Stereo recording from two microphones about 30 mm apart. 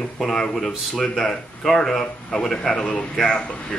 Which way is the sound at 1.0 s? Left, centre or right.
Left.